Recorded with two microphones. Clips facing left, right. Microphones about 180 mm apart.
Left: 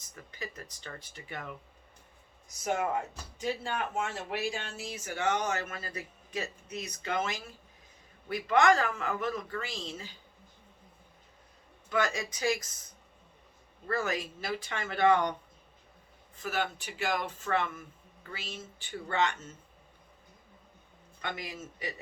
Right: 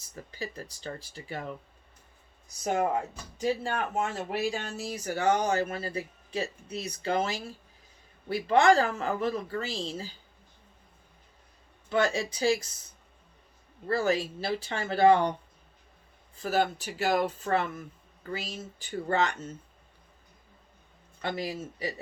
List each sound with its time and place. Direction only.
0.2 s speech: 30° right (ahead or behind)
2.6 s speech: 35° right (ahead or behind)
11.9 s speech: 30° right (ahead or behind)
13.8 s speech: 30° right (ahead or behind)
21.2 s speech: 35° right (ahead or behind)